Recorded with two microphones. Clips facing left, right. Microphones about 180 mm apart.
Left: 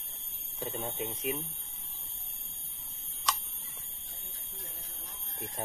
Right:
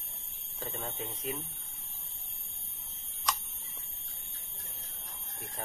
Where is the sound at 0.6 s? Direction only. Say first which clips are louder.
Left 4 dB; 20° left (ahead or behind).